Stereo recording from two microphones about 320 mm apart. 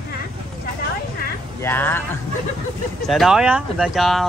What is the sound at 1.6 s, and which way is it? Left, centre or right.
Speech, centre.